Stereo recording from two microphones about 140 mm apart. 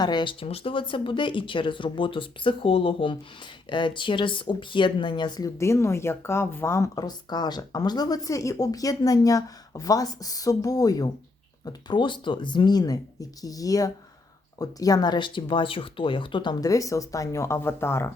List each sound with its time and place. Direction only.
0.0 s speech: 30° left (ahead or behind)
5.5 s speech: 20° left (ahead or behind)